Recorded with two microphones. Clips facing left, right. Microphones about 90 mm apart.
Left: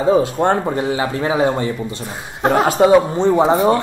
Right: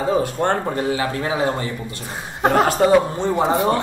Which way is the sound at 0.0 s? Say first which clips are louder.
Left 5 dB; 20° left (ahead or behind).